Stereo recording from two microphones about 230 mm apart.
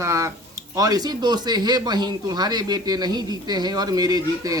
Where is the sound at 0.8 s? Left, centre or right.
Centre.